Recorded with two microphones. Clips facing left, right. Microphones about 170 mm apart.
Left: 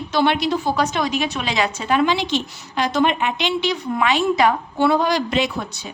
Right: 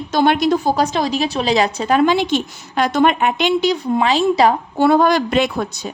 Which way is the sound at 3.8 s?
30° right (ahead or behind).